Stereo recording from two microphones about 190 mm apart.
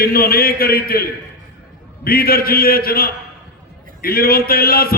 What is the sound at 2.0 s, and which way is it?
A man's voice, 50° left (ahead or behind).